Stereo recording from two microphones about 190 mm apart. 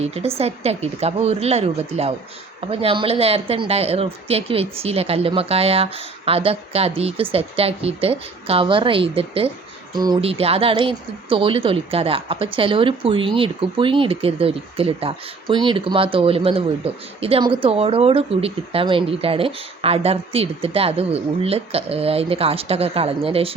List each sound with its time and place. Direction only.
0.0 s speech: 35° right (ahead or behind)